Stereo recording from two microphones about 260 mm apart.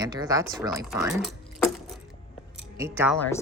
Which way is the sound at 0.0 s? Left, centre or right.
Centre.